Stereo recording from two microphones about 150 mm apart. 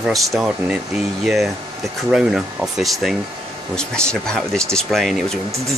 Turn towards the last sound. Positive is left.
turn(degrees=0)  # may be behind; listen again after turning